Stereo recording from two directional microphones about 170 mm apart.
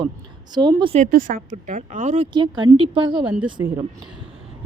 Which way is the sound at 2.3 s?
25° right (ahead or behind).